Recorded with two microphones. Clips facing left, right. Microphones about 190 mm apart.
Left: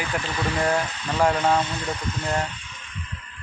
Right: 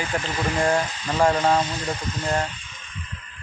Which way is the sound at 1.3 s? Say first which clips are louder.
Right 1 dB; 60° left (ahead or behind).